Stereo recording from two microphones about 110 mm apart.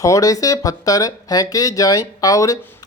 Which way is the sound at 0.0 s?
30° left (ahead or behind).